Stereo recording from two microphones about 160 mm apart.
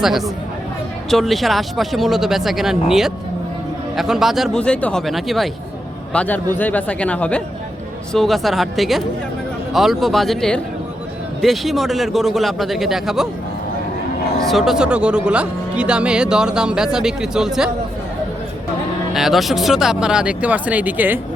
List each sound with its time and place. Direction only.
1.1 s speech: centre (ahead or behind)
6.1 s speech: 10° left (ahead or behind)
14.4 s speech: centre (ahead or behind)
19.1 s speech: centre (ahead or behind)